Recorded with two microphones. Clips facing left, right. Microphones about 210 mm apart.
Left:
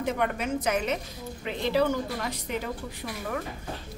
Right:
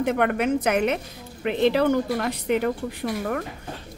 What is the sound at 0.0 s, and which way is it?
A woman's voice, 65° right (ahead or behind).